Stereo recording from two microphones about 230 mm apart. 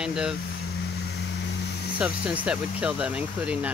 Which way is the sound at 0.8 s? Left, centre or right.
Left.